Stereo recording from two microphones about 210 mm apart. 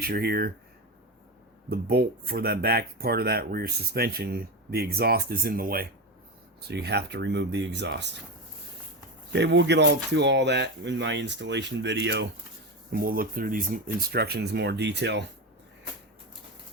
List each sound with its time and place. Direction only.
0.0 s speech: 45° right (ahead or behind)
1.7 s speech: 45° right (ahead or behind)
9.3 s speech: 55° right (ahead or behind)
12.9 s speech: 45° right (ahead or behind)